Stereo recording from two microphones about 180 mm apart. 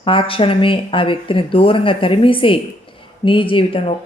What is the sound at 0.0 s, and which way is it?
Speech, 30° left (ahead or behind).